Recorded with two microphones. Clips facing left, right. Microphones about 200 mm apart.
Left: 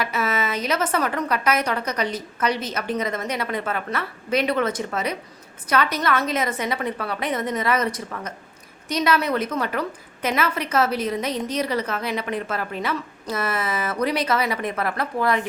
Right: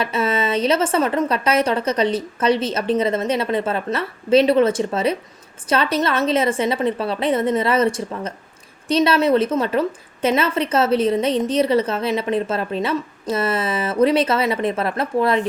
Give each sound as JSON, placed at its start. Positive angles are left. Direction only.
{"t": 0.0, "sound": "a woman's voice", "side_deg": -25}